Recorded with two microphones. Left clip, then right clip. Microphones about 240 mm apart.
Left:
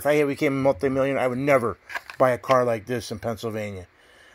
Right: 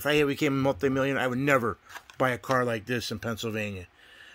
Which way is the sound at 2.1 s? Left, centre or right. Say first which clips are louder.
Left 7 dB; centre.